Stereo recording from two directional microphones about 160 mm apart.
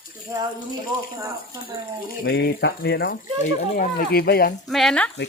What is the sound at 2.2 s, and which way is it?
Speech, 75° left (ahead or behind).